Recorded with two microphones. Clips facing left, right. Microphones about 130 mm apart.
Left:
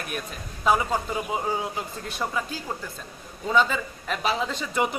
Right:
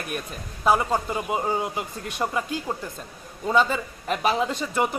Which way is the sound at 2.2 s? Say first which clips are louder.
Right 3 dB; 30° right (ahead or behind).